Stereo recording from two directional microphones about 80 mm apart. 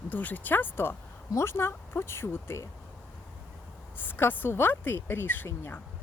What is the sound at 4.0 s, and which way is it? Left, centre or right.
Speech, left.